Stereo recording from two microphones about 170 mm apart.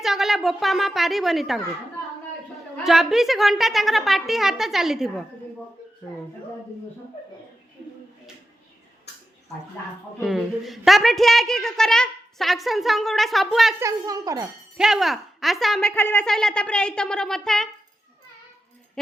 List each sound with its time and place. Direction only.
0.0 s a woman's voice: centre (ahead or behind)
2.8 s a woman's voice: centre (ahead or behind)
10.2 s a woman's voice: centre (ahead or behind)
13.7 s a woman's voice: 20° right (ahead or behind)
14.8 s a woman's voice: centre (ahead or behind)